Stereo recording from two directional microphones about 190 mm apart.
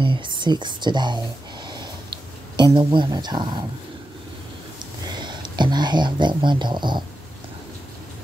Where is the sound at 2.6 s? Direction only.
25° right (ahead or behind).